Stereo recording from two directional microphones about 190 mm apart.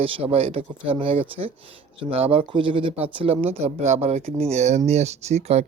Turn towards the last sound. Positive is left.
turn(degrees=-35)  # may be behind; listen again after turning